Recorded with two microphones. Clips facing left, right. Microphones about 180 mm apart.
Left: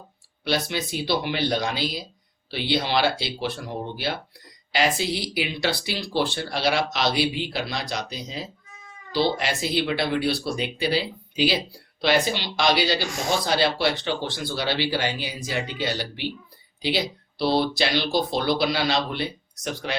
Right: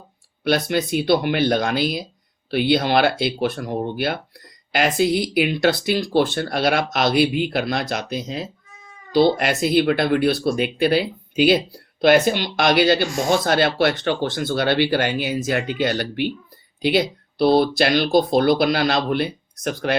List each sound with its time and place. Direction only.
0.4 s speech: 55° right (ahead or behind)